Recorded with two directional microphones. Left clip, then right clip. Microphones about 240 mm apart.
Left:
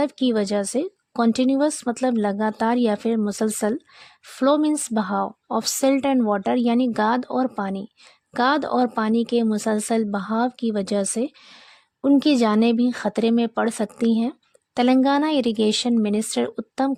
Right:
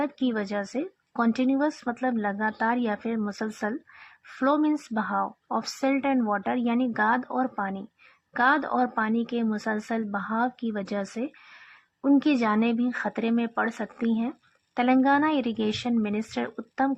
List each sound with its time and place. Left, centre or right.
0.0 s a woman's voice: left